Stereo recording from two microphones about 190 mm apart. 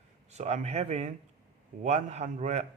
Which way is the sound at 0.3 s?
35° right (ahead or behind).